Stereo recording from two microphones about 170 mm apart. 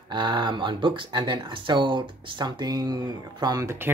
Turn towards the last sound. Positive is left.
turn(degrees=-15)  # may be behind; listen again after turning